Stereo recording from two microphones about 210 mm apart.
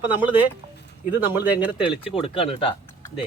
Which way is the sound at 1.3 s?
10° right (ahead or behind).